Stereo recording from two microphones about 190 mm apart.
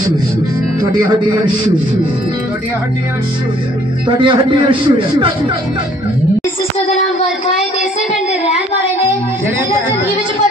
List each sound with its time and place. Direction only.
0.9 s a man's voice: 20° right (ahead or behind)
4.1 s a man's voice: 25° right (ahead or behind)